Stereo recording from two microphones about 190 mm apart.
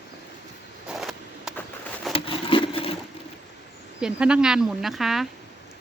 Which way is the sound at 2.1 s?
30° left (ahead or behind).